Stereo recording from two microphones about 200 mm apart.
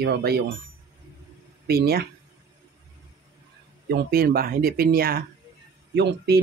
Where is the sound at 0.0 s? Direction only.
55° right (ahead or behind).